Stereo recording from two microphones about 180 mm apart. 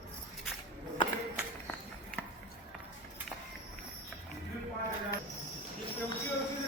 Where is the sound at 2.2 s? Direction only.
10° left (ahead or behind).